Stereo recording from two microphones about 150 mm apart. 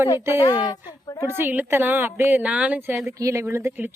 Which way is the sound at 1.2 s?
15° right (ahead or behind).